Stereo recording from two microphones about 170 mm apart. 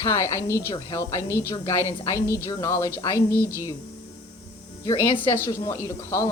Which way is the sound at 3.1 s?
15° right (ahead or behind).